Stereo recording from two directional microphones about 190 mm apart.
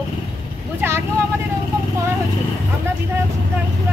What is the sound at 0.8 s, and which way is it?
Speech, 15° right (ahead or behind).